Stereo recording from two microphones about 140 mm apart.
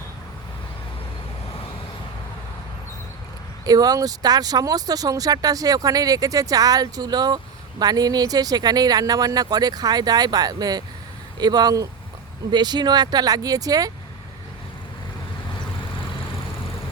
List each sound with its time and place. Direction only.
1.5 s vehicle: 40° left (ahead or behind)
3.7 s speech: 25° right (ahead or behind)
15.5 s vehicle: 35° left (ahead or behind)